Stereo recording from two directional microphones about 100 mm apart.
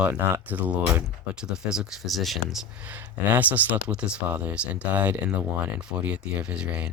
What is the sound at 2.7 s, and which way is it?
Speech, 15° right (ahead or behind).